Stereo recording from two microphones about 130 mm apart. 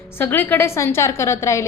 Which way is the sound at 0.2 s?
15° left (ahead or behind).